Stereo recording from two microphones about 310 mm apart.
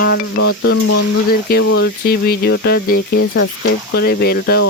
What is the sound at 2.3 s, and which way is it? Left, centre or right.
Speech, left.